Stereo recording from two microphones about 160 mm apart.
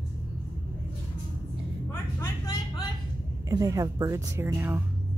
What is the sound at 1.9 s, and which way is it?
Vehicle, 20° left (ahead or behind).